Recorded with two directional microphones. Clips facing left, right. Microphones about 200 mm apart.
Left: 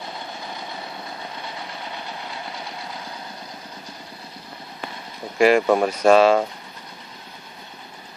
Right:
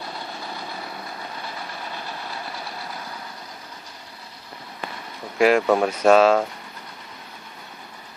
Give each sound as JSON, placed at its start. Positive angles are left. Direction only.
{"t": 1.4, "sound": "vehicle", "side_deg": 20}
{"t": 5.4, "sound": "speech", "side_deg": 0}